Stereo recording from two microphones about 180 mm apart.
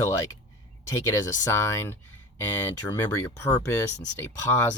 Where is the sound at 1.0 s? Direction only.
15° left (ahead or behind).